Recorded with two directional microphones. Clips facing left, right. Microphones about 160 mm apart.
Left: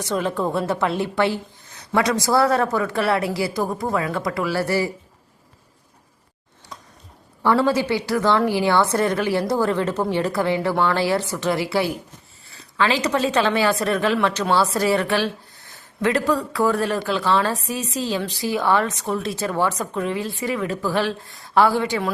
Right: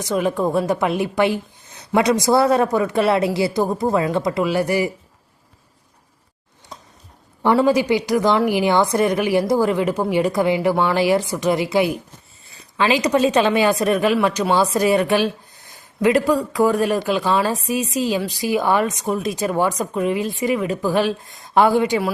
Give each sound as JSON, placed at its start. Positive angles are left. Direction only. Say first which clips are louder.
{"t": 0.0, "sound": "a woman's voice", "louder": "right 3 dB", "side_deg": -10}
{"t": 7.4, "sound": "a woman's voice", "louder": "right 3 dB", "side_deg": -15}